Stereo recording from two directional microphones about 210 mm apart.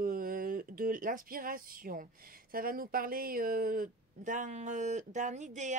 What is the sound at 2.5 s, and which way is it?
Speech, 45° right (ahead or behind).